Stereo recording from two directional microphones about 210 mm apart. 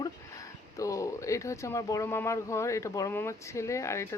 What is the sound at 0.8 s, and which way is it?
Speech, 15° left (ahead or behind).